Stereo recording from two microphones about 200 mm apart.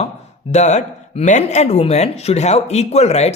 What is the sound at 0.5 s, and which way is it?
Speech, 35° left (ahead or behind).